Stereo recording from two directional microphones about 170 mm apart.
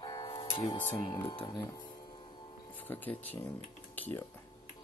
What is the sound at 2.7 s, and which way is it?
Speech, 10° left (ahead or behind).